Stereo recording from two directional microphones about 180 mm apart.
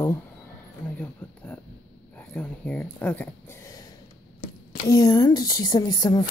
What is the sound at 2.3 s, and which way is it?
Speech, 5° left (ahead or behind).